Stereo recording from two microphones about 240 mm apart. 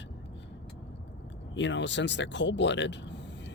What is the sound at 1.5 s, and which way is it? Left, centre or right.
Speech, left.